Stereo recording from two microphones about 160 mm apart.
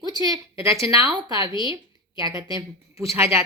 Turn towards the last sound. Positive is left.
turn(degrees=-15)  # may be behind; listen again after turning